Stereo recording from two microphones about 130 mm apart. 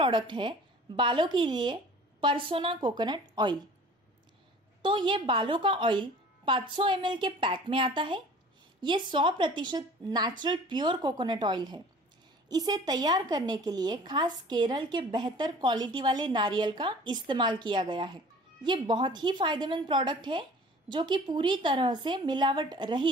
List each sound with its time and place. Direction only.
0.0 s a woman's voice: 35° right (ahead or behind)
4.8 s a woman's voice: 40° right (ahead or behind)